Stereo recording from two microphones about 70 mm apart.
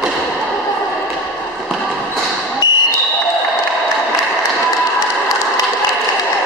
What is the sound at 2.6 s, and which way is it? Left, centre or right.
Basketball bounce, left.